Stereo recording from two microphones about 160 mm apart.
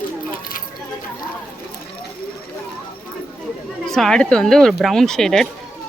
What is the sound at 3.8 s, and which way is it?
Speech, 5° left (ahead or behind).